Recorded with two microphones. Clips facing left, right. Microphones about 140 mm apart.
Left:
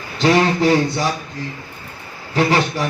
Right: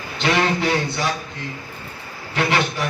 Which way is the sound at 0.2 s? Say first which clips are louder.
Left 5 dB; 35° left (ahead or behind).